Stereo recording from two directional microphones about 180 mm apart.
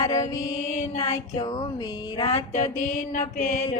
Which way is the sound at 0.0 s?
20° left (ahead or behind).